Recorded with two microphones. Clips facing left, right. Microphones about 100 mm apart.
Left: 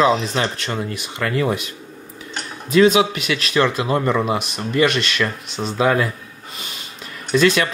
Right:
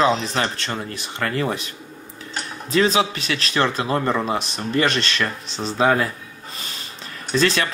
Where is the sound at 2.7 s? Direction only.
35° right (ahead or behind).